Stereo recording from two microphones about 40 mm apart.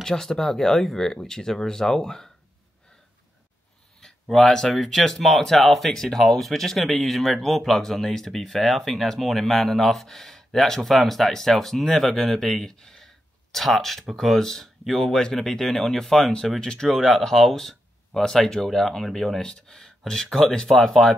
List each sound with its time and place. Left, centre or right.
0.0 s speech: centre
4.0 s a sound: centre
4.7 s speech: centre
12.7 s speech: centre
13.0 s speech: centre
16.9 s speech: centre